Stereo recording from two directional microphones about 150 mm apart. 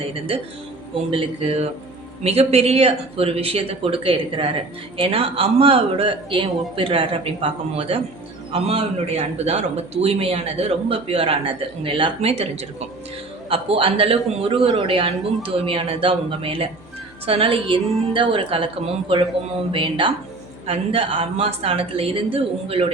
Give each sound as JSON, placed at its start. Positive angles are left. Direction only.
{"t": 0.9, "sound": "a man's voice", "side_deg": -40}